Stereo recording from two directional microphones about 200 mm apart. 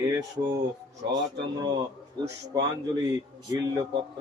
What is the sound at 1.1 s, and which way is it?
Speech, 20° right (ahead or behind).